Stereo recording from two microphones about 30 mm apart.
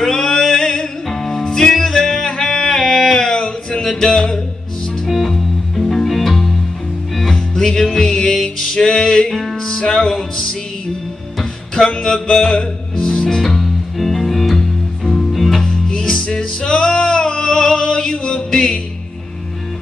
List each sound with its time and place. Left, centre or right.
0.0 s music: left
5.0 s music: centre
6.0 s music: centre
7.6 s music: centre
11.7 s music: left
13.6 s music: centre
15.6 s music: left